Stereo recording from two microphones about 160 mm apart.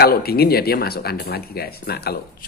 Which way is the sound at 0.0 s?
75° left (ahead or behind).